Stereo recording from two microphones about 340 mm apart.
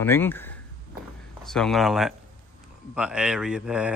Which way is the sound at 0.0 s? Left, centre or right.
Centre.